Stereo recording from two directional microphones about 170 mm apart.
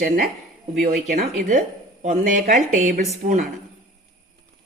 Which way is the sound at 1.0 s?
50° right (ahead or behind).